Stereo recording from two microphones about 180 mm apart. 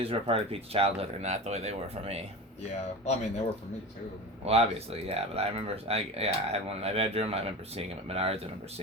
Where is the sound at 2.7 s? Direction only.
40° left (ahead or behind).